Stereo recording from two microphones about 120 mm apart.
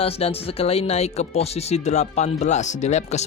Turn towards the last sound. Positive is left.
turn(degrees=70)  # may be behind; listen again after turning